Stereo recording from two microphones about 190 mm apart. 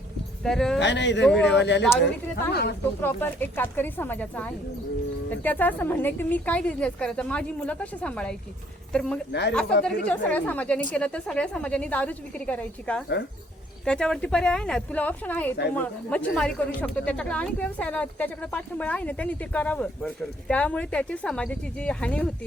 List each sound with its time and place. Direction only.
0.4 s speech: 5° left (ahead or behind)
0.8 s speech: 65° left (ahead or behind)
3.0 s speech: 10° left (ahead or behind)